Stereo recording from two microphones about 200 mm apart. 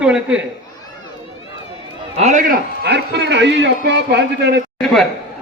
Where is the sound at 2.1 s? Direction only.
30° right (ahead or behind).